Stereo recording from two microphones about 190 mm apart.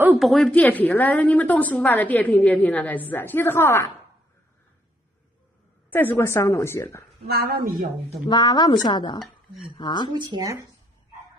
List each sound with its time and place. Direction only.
0.0 s a woman's voice: 5° right (ahead or behind); by 3.9 s 15° left (ahead or behind)
5.9 s a woman's voice: 10° left (ahead or behind)
7.2 s speech: 55° right (ahead or behind)
8.3 s speech: 20° left (ahead or behind)
10.1 s speech: 25° right (ahead or behind)